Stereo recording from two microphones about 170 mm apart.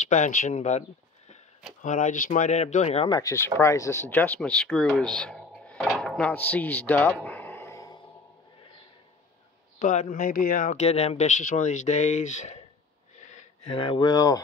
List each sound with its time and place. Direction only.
0.0 s speech: 45° left (ahead or behind)
3.1 s speech: 20° left (ahead or behind)
9.8 s speech: 50° left (ahead or behind)
13.2 s a sound: 45° left (ahead or behind)
13.7 s speech: 30° left (ahead or behind)